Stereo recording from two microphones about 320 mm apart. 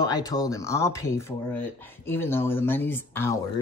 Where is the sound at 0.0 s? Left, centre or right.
Centre.